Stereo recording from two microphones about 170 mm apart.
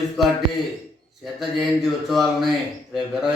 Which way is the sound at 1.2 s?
Centre (ahead or behind).